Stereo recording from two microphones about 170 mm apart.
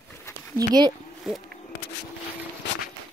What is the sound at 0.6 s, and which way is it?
Speech, 25° right (ahead or behind).